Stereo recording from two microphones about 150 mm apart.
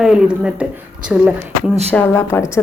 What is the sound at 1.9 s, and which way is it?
Speech, 15° left (ahead or behind).